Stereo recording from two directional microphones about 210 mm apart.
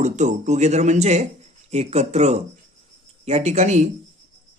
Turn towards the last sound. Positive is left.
turn(degrees=-30)  # may be behind; listen again after turning